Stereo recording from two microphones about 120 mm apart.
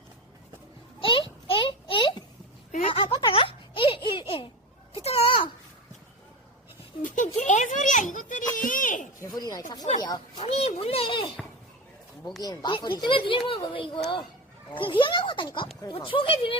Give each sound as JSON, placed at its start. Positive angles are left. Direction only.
{"t": 1.0, "sound": "a sound", "side_deg": 45}
{"t": 7.0, "sound": "a sound", "side_deg": 90}
{"t": 9.2, "sound": "snake", "side_deg": 30}
{"t": 10.3, "sound": "children playing", "side_deg": 60}
{"t": 12.4, "sound": "speech", "side_deg": 35}
{"t": 16.1, "sound": "speech", "side_deg": 50}